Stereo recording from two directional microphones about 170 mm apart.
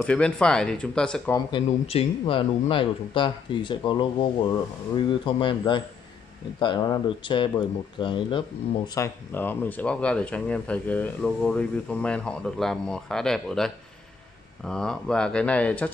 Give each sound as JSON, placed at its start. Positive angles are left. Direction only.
{"t": 0.0, "sound": "speech", "side_deg": 5}
{"t": 1.9, "sound": "a man's voice", "side_deg": 35}